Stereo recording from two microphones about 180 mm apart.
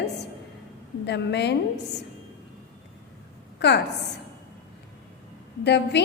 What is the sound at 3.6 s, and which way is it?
Speech, 75° left (ahead or behind).